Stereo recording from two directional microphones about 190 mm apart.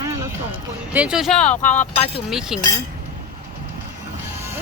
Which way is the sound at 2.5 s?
5° right (ahead or behind).